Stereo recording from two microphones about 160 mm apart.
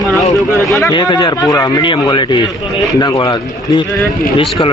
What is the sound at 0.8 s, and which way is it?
Speech, 25° left (ahead or behind).